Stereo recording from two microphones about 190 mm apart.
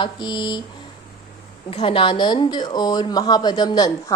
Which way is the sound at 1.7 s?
30° left (ahead or behind).